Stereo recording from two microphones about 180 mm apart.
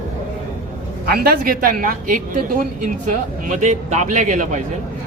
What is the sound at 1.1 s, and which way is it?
Speech, 55° right (ahead or behind).